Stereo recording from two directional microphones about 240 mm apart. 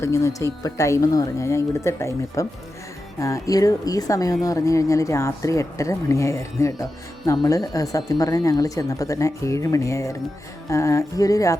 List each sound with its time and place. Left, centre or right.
0.0 s speech: centre